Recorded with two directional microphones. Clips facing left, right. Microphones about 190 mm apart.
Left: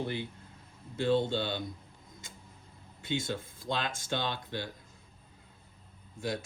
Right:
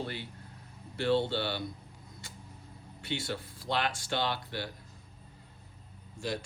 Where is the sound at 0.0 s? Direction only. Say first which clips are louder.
Left 3 dB; 20° left (ahead or behind).